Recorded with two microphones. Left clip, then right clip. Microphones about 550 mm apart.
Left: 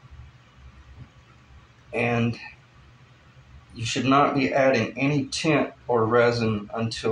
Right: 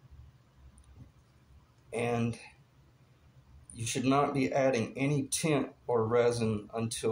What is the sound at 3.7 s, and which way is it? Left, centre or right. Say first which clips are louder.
Speech: left 8 dB; right.